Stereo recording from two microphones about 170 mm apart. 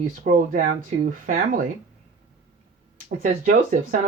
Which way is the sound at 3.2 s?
50° right (ahead or behind).